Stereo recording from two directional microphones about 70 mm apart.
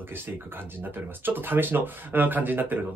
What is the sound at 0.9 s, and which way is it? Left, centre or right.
Speech, right.